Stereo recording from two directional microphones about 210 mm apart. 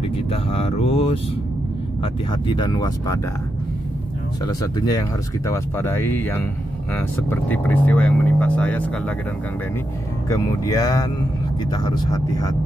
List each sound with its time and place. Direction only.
0.3 s speech: 30° left (ahead or behind)
2.3 s speech: 20° left (ahead or behind)
4.5 s speech: 20° left (ahead or behind)
10.3 s speech: 15° left (ahead or behind)